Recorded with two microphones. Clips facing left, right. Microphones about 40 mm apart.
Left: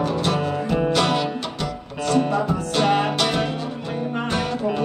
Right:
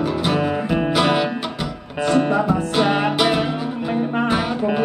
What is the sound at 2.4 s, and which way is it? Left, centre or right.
Music, centre.